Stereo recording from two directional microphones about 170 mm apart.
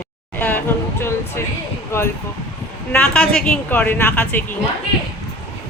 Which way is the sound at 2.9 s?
5° left (ahead or behind).